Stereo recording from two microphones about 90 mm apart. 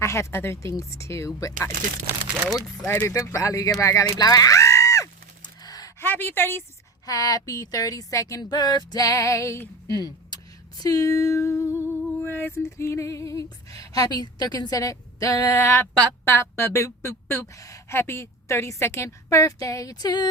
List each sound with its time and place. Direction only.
0.0 s speech: 30° left (ahead or behind)
2.8 s speech: 25° left (ahead or behind)
3.1 s speech: 35° left (ahead or behind)
5.6 s a sound: 45° left (ahead or behind)
6.0 s a woman's voice: 25° left (ahead or behind)
7.0 s speech: 40° left (ahead or behind)
8.4 s speech: 50° left (ahead or behind); by 9.9 s 35° left (ahead or behind)
10.8 s music: 40° left (ahead or behind)
14.2 s speech: 45° left (ahead or behind)